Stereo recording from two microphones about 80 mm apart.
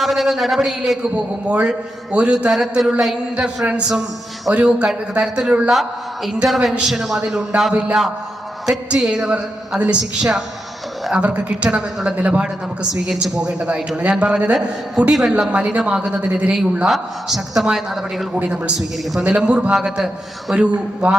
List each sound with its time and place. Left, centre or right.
0.0 s a man's voice: centre
1.1 s a man's voice: centre
2.5 s a man's voice: centre
9.0 s a man's voice: centre
13.2 s a man's voice: centre
16.8 s a man's voice: centre
19.2 s a man's voice: centre